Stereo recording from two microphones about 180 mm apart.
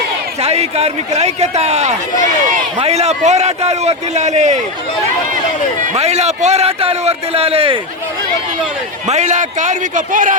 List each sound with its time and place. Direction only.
0.4 s a man's voice: 35° right (ahead or behind)
5.8 s a man's voice: 40° right (ahead or behind)
9.0 s a man's voice: 40° right (ahead or behind)